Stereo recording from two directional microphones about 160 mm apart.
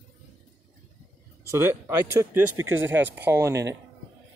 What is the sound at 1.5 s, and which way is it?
Speech, 15° right (ahead or behind).